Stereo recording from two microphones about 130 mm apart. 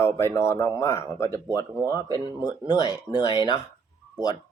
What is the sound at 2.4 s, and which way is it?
Speech, 30° left (ahead or behind).